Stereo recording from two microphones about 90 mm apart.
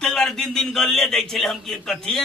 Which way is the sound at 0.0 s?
5° left (ahead or behind).